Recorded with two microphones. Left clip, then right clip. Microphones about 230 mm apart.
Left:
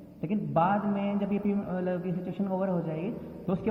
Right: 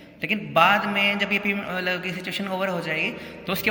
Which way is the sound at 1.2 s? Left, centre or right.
Centre.